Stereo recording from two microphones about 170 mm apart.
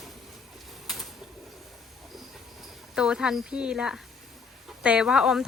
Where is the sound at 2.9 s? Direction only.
5° right (ahead or behind).